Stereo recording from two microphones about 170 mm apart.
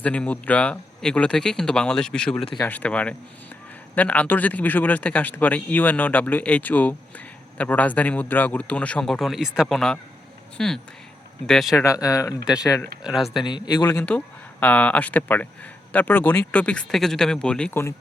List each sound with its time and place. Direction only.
0.0 s speech: 10° left (ahead or behind)
11.8 s speech: 20° left (ahead or behind)
13.0 s speech: 5° right (ahead or behind)
13.4 s speech: 25° left (ahead or behind)
13.9 s speech: 5° left (ahead or behind)